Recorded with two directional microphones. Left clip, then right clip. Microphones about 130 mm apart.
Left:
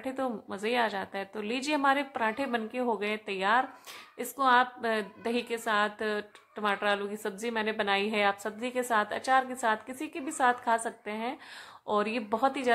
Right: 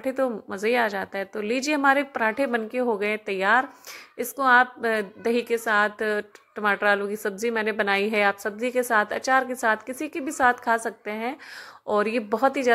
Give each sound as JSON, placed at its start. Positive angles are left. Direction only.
{"t": 0.0, "sound": "a woman's voice", "side_deg": -30}